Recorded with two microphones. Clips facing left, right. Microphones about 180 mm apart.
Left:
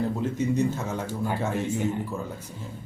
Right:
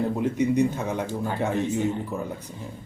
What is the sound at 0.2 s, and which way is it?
Speech, 15° right (ahead or behind).